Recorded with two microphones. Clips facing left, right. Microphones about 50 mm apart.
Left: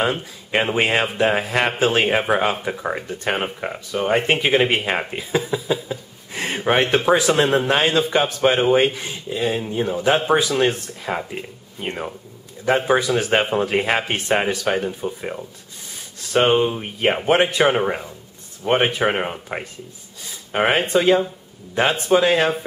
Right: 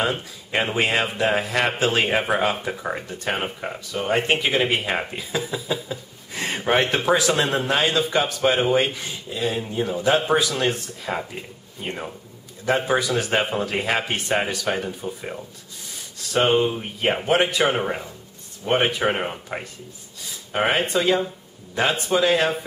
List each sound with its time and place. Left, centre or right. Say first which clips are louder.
0.0 s speech: left 3 dB; centre
4.7 s speech: left 2 dB; centre
17.7 s speech: left 4 dB; centre